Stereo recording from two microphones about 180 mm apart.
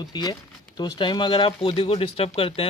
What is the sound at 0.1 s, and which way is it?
Speech, 25° left (ahead or behind).